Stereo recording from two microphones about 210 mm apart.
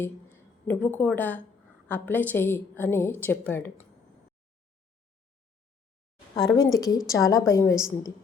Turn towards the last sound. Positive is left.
turn(degrees=15)  # may be behind; listen again after turning